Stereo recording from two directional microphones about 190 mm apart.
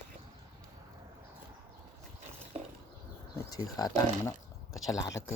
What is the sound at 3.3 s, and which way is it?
Speech, 20° left (ahead or behind).